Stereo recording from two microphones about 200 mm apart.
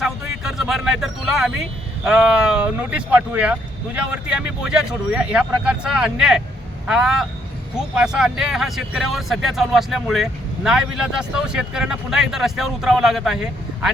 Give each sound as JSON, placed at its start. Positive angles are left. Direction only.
{"t": 0.0, "sound": "speech", "side_deg": -5}